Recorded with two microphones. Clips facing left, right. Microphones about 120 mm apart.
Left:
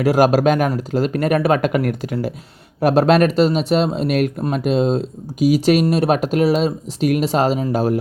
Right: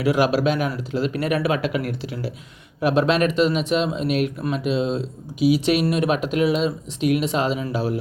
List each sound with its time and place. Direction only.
0.0 s speech: 45° left (ahead or behind)